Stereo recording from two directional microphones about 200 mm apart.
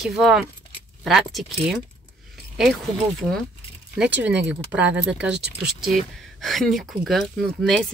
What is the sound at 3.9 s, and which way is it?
Speech, 5° right (ahead or behind).